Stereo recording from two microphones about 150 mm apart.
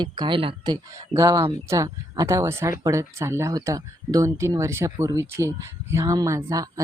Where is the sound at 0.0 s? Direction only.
30° right (ahead or behind).